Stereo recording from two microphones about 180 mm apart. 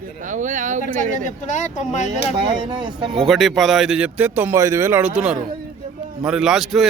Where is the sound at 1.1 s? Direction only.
40° left (ahead or behind).